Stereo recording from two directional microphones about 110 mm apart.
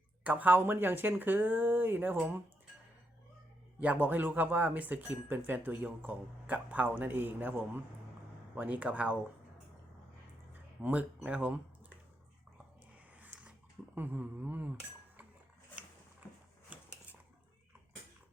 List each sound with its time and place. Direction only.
0.3 s speech: 15° right (ahead or behind)
3.8 s speech: 15° right (ahead or behind)
10.5 s speech: 15° right (ahead or behind)
13.1 s a sound: 15° right (ahead or behind)
13.9 s speech: 15° right (ahead or behind)
16.7 s a sound: 10° right (ahead or behind)